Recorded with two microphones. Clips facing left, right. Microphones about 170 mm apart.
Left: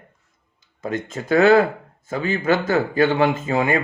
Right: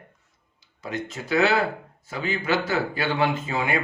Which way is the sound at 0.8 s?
50° left (ahead or behind).